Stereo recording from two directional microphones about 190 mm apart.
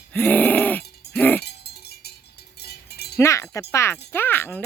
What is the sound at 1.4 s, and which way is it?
Cowbell, 60° left (ahead or behind).